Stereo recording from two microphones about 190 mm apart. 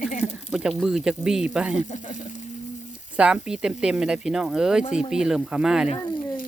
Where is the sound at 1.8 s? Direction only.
40° left (ahead or behind).